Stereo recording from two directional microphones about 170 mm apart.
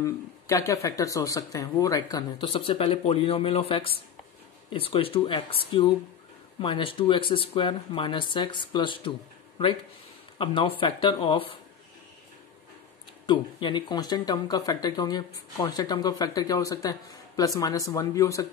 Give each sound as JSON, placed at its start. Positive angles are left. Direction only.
{"t": 0.0, "sound": "speech", "side_deg": 20}
{"t": 10.3, "sound": "speech", "side_deg": 30}
{"t": 13.3, "sound": "speech", "side_deg": 30}